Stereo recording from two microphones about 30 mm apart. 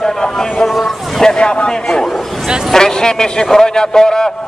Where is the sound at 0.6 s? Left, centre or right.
Centre.